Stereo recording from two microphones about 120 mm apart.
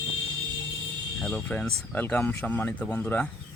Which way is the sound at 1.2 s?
5° left (ahead or behind).